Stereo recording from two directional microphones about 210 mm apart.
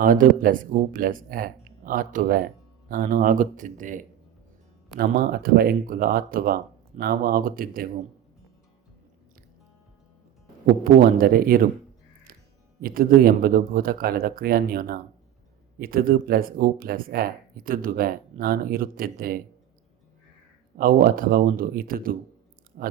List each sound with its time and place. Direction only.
0.0 s speech: 40° right (ahead or behind)
10.8 s speech: 45° right (ahead or behind)
12.8 s speech: 45° right (ahead or behind)
20.7 s speech: 45° right (ahead or behind)